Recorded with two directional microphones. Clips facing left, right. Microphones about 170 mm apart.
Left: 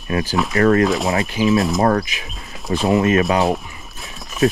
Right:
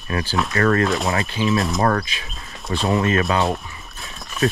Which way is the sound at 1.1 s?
20° left (ahead or behind).